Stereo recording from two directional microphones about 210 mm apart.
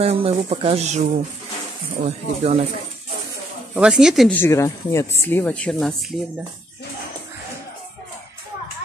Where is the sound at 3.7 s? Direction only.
5° right (ahead or behind).